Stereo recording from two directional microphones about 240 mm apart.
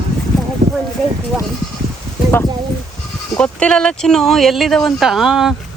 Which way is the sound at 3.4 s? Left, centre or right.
Centre.